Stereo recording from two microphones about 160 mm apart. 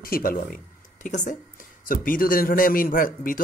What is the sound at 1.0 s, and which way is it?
A man's voice, 50° left (ahead or behind).